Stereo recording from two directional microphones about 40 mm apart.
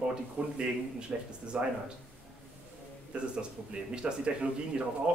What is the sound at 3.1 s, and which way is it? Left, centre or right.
Speech, right.